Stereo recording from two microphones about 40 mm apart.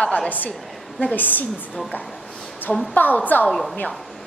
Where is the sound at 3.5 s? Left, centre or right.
Centre.